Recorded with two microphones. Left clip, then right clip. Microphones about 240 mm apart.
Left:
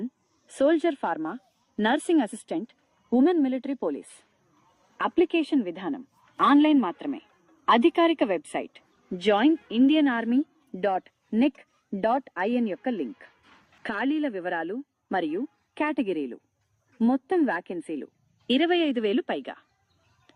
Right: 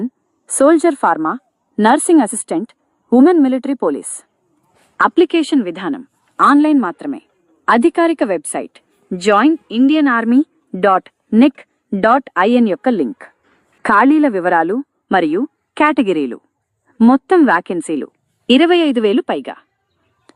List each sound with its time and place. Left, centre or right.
0.5 s a woman's voice: right